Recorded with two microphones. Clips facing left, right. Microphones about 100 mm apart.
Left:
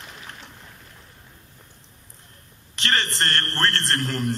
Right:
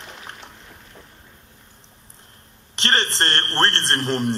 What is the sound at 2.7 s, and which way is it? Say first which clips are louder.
A man's voice: right 3 dB; 30° right (ahead or behind).